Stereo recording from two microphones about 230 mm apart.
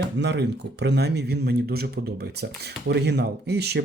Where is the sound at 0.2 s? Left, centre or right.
Right.